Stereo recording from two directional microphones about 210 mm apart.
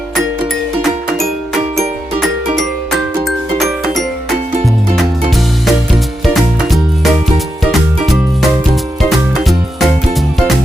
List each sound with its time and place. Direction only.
0.8 s music: centre (ahead or behind)
3.2 s music: centre (ahead or behind)
6.2 s music: centre (ahead or behind)